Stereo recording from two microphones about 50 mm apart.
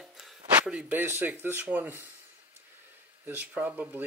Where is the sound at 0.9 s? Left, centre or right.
Right.